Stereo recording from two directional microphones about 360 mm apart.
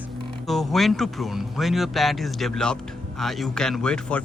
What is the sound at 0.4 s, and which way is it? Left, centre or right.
Speech, centre.